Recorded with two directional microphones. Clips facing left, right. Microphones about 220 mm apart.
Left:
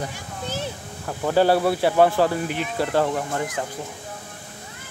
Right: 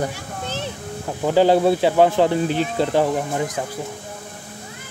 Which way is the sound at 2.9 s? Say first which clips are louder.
Right 3 dB; 15° right (ahead or behind).